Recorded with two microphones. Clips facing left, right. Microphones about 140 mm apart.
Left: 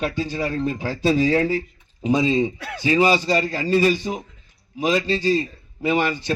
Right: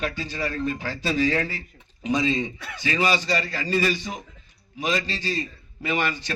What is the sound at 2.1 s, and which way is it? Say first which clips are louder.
Speech: left 5 dB; 10° left (ahead or behind).